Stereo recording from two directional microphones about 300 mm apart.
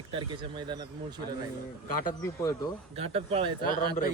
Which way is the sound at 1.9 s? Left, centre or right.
Left.